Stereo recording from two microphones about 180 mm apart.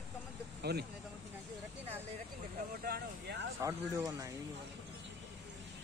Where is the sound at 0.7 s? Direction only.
65° right (ahead or behind).